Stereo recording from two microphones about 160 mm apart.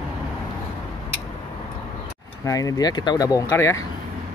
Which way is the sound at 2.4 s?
20° left (ahead or behind).